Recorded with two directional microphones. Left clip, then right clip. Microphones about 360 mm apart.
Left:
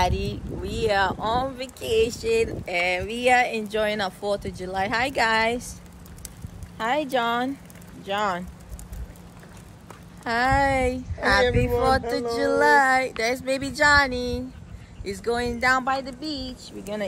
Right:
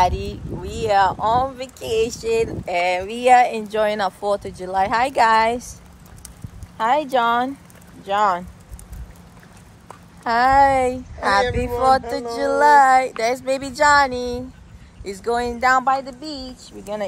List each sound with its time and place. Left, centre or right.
0.3 s speech: centre
6.8 s speech: centre
10.2 s speech: centre
16.2 s speech: centre